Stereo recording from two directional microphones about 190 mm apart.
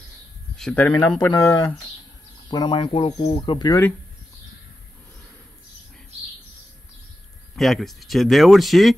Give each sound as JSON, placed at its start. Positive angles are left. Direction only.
{"t": 0.6, "sound": "speech", "side_deg": 5}
{"t": 7.5, "sound": "speech", "side_deg": 0}